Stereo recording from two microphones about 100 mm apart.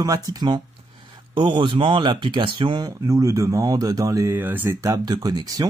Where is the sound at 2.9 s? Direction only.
30° right (ahead or behind).